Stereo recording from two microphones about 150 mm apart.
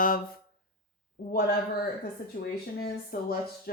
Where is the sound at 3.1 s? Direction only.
70° left (ahead or behind).